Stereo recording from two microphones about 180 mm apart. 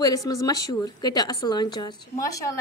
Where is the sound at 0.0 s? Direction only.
20° left (ahead or behind).